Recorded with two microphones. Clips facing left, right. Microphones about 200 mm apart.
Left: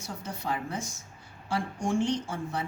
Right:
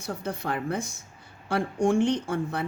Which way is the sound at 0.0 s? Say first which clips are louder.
Right 5 dB; 60° right (ahead or behind).